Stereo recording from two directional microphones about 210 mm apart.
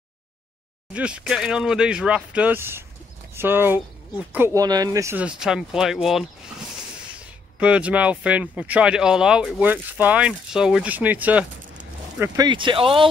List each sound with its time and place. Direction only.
0.9 s speech: 5° right (ahead or behind)
7.5 s speech: 5° right (ahead or behind)
12.2 s speech: 20° right (ahead or behind)